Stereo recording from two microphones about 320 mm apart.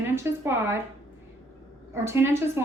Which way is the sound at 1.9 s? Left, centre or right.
Centre.